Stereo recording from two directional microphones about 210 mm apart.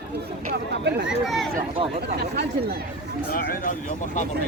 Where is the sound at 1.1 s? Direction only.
Centre (ahead or behind).